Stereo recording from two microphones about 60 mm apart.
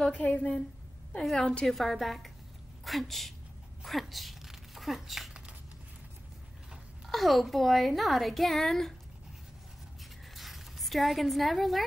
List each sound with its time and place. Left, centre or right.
0.0 s a woman's voice: centre
1.7 s a woman's voice: centre
7.1 s a woman's voice: centre
10.3 s a sound: centre